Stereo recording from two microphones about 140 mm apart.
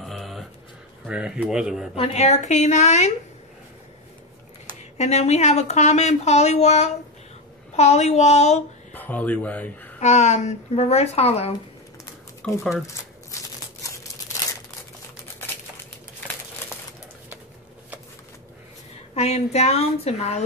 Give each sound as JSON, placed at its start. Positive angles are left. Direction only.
{"t": 0.0, "sound": "a sound", "side_deg": 0}
{"t": 1.0, "sound": "speech", "side_deg": -5}
{"t": 2.0, "sound": "speech", "side_deg": 50}
{"t": 4.6, "sound": "a woman's voice", "side_deg": 50}
{"t": 8.9, "sound": "speech", "side_deg": 10}
{"t": 9.9, "sound": "a woman's voice", "side_deg": 55}
{"t": 12.4, "sound": "speech", "side_deg": 5}
{"t": 19.1, "sound": "a woman's voice", "side_deg": 50}